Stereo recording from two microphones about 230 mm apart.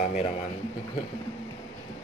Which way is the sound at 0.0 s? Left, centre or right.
Left.